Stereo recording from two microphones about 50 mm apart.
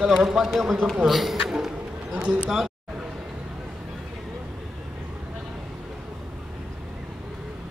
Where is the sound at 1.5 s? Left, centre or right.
Centre.